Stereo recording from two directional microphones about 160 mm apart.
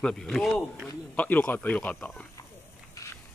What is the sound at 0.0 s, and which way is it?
Speech, 5° left (ahead or behind).